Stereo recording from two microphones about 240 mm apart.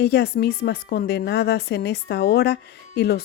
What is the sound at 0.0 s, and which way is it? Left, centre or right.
A woman's voice, left.